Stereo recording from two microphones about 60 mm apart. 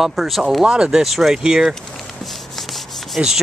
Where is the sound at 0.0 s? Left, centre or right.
Centre.